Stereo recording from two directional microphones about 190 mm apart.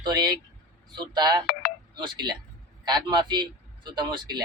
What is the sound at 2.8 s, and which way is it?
Speech, 25° right (ahead or behind).